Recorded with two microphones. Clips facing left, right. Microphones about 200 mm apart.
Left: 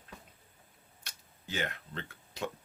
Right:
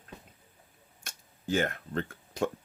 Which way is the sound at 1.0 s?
50° right (ahead or behind).